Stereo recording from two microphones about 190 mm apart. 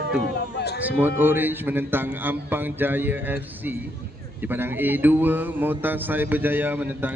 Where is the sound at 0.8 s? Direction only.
10° right (ahead or behind).